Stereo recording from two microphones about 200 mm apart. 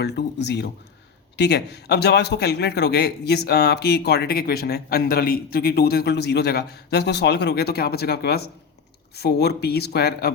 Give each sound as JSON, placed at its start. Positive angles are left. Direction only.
{"t": 0.0, "sound": "a man's voice", "side_deg": 55}